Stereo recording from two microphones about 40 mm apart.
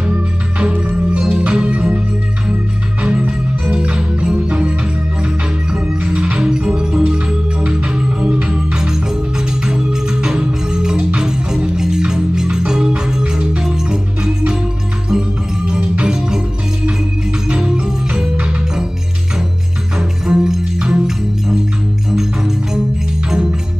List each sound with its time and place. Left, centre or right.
0.0 s music: right
8.5 s music: centre
17.6 s music: centre
20.0 s music: centre
22.1 s music: centre